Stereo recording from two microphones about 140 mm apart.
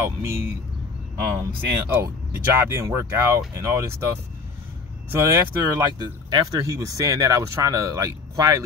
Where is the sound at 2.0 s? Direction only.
20° right (ahead or behind).